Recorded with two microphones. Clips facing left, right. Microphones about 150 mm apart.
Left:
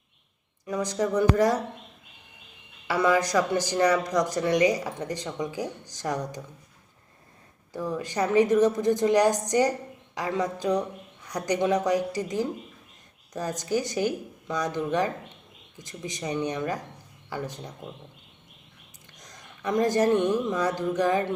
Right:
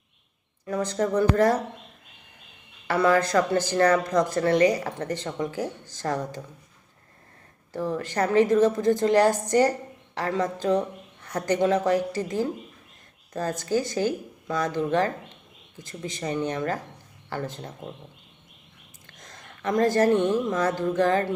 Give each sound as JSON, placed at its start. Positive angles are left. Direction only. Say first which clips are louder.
{"t": 0.7, "sound": "speech", "louder": "right 1 dB", "side_deg": 15}
{"t": 2.8, "sound": "speech", "louder": "right 2 dB", "side_deg": 15}
{"t": 7.9, "sound": "speech", "louder": "right 1 dB", "side_deg": 15}
{"t": 19.0, "sound": "speech", "louder": "right 2 dB", "side_deg": 15}